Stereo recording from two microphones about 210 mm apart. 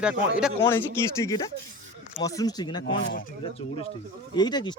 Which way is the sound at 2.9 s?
45° left (ahead or behind).